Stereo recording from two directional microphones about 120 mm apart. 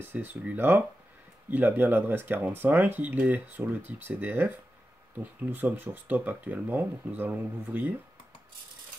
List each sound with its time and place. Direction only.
0.0 s speech: 15° right (ahead or behind)